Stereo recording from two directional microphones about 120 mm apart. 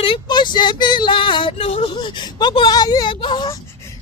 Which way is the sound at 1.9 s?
40° left (ahead or behind).